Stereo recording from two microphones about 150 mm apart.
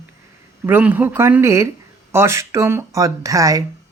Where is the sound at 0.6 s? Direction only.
10° right (ahead or behind).